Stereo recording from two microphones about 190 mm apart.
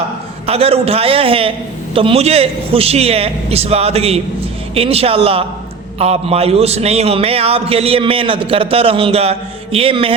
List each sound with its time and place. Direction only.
0.4 s a man's voice: 30° right (ahead or behind)